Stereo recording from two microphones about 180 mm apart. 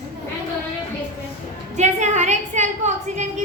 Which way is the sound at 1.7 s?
40° right (ahead or behind).